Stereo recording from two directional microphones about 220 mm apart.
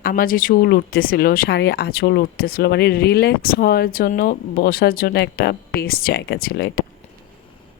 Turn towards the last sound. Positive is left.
turn(degrees=45)  # may be behind; listen again after turning